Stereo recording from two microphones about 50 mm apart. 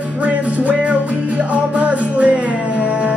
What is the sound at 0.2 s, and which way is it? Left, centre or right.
Music, right.